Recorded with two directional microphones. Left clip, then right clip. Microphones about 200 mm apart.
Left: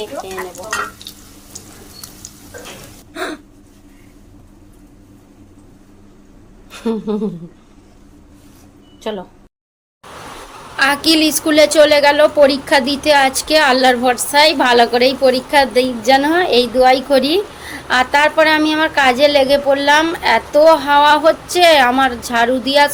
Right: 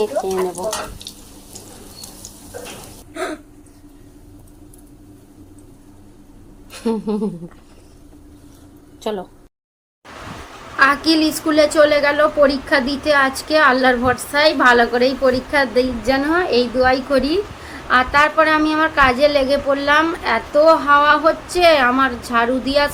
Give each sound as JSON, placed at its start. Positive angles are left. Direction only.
{"t": 3.1, "sound": "gasp", "side_deg": 90}
{"t": 6.7, "sound": "a woman's voice", "side_deg": 0}
{"t": 9.0, "sound": "a woman's voice", "side_deg": 0}
{"t": 11.0, "sound": "a woman's voice", "side_deg": 5}